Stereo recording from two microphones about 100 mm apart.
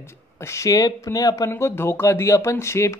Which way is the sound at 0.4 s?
30° left (ahead or behind).